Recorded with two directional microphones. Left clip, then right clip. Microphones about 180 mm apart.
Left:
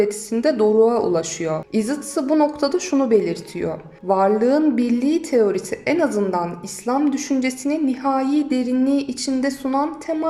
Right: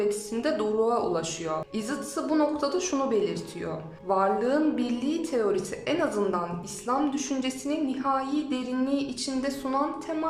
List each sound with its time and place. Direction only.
0.1 s speech: 20° left (ahead or behind)